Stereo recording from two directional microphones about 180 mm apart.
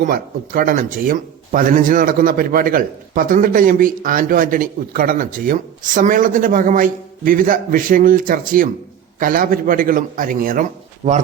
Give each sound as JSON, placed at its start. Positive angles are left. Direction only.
{"t": 0.0, "sound": "speech", "side_deg": -50}